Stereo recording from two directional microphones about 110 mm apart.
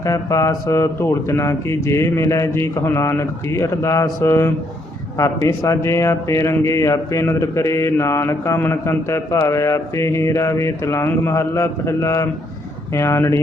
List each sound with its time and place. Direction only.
0.0 s a man's voice: 30° left (ahead or behind)